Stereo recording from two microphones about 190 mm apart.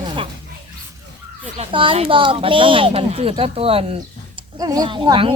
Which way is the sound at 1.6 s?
25° right (ahead or behind).